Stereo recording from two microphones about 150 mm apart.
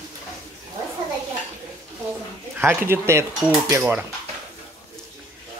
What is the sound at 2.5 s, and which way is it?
Speech, 15° right (ahead or behind).